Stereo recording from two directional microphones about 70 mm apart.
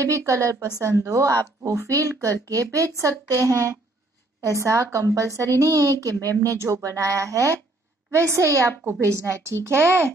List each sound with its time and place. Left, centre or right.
0.0 s a woman's voice: right